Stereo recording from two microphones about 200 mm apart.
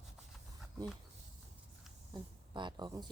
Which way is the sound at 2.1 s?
20° right (ahead or behind).